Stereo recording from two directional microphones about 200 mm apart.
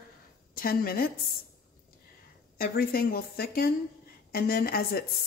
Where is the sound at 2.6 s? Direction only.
50° left (ahead or behind).